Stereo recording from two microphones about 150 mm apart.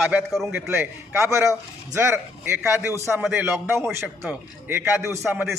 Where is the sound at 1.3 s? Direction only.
20° right (ahead or behind).